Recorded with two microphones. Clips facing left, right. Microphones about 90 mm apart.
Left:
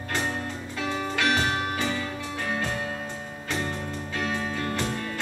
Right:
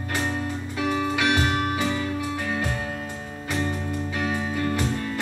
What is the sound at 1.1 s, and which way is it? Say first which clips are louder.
Music: right 2 dB; 15° right (ahead or behind).